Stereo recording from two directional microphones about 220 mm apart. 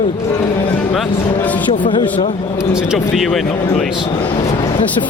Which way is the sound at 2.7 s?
5° right (ahead or behind).